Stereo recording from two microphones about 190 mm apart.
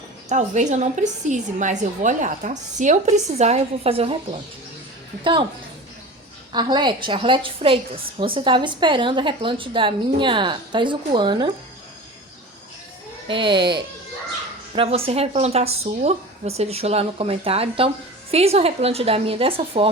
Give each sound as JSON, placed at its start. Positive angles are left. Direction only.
{"t": 0.3, "sound": "a woman's voice", "side_deg": -40}
{"t": 6.5, "sound": "a woman's voice", "side_deg": -25}
{"t": 13.2, "sound": "a woman's voice", "side_deg": -25}